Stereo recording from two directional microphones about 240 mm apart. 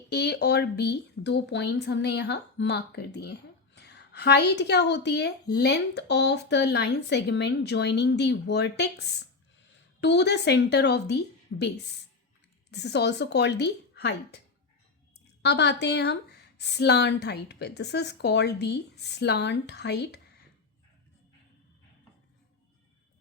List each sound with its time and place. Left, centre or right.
0.1 s a woman's voice: left
12.7 s a woman's voice: left